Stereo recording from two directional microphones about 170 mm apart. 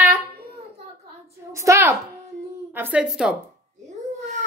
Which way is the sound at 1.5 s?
15° right (ahead or behind).